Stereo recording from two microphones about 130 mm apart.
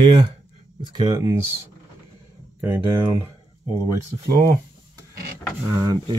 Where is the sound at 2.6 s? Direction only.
15° right (ahead or behind).